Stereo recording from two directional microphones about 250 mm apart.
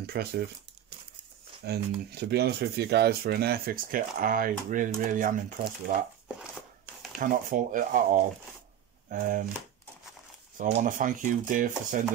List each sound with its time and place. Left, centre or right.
0.0 s speech: right
1.7 s speech: right
7.2 s speech: right
10.6 s speech: right